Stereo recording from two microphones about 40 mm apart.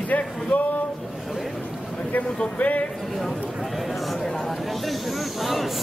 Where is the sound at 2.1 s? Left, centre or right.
Left.